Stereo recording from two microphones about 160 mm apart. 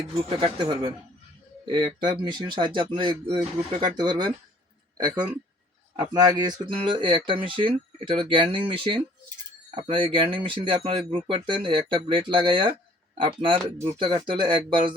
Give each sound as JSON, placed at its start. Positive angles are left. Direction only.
{"t": 0.3, "sound": "speech", "side_deg": -30}